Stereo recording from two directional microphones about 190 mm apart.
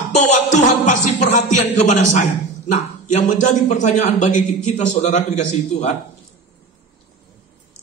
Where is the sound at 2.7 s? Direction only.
40° left (ahead or behind).